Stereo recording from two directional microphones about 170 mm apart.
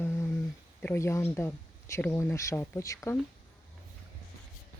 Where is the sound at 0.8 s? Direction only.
15° left (ahead or behind).